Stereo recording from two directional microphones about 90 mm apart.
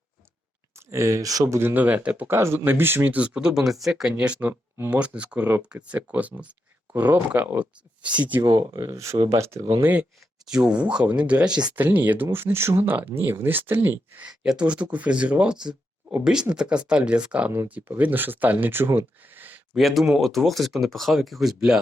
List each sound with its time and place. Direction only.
0.8 s speech: 35° right (ahead or behind)
1.5 s speech: 20° right (ahead or behind)
8.4 s speech: 35° right (ahead or behind)
8.7 s speech: 45° right (ahead or behind)
9.6 s speech: 45° right (ahead or behind)
9.8 s speech: 20° right (ahead or behind)
10.4 s speech: 10° right (ahead or behind); by 14.3 s 25° right (ahead or behind)
14.3 s speech: 10° right (ahead or behind)
19.7 s speech: centre (ahead or behind)